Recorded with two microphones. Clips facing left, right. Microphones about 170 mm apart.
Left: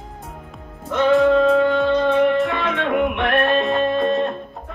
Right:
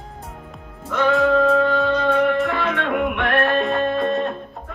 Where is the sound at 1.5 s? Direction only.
Centre (ahead or behind).